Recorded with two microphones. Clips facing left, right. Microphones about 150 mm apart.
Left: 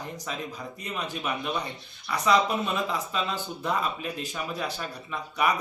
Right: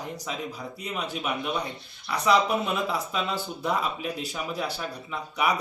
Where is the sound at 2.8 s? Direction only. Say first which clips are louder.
Right 1 dB; 10° right (ahead or behind).